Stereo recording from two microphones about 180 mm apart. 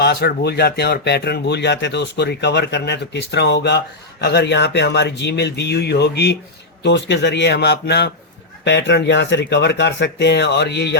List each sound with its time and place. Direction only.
0.0 s speech: 65° left (ahead or behind)